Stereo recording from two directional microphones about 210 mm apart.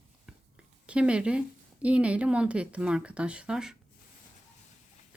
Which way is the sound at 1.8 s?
5° right (ahead or behind).